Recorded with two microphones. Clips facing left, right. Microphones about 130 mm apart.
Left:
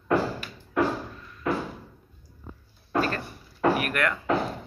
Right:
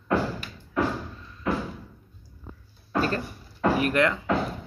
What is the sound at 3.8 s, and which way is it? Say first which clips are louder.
Music: right 4 dB; 25° right (ahead or behind).